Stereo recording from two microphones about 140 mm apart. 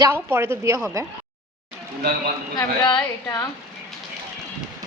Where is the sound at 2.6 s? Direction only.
25° left (ahead or behind).